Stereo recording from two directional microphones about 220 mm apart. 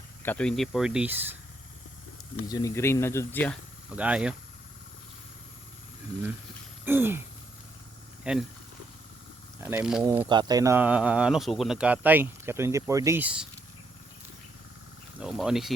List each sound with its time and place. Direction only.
0.2 s speech: 5° left (ahead or behind); by 1.3 s 10° right (ahead or behind)
2.5 s speech: 15° left (ahead or behind)
3.8 s speech: 5° right (ahead or behind)
6.8 s speech: 10° right (ahead or behind)
8.2 s speech: 5° right (ahead or behind)
9.6 s speech: 10° right (ahead or behind)
10.2 s speech: 20° right (ahead or behind)
15.2 s speech: 5° right (ahead or behind)